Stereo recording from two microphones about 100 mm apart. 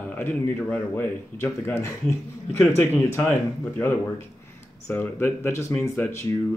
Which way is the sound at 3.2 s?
15° left (ahead or behind).